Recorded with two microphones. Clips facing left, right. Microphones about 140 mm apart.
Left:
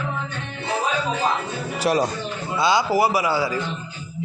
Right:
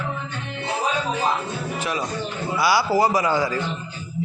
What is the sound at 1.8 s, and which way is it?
Speech, 35° left (ahead or behind).